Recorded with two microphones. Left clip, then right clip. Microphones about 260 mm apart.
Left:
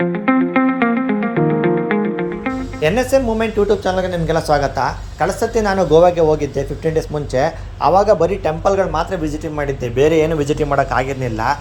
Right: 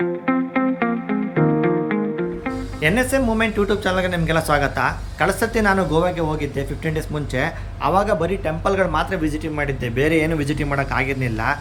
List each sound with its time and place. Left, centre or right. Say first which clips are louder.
0.3 s music: left 8 dB; centre
4.5 s speech: left 3 dB; centre
7.9 s speech: left 6 dB; centre